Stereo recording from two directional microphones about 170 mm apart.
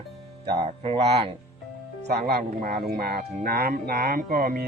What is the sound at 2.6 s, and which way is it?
Speech, 60° right (ahead or behind).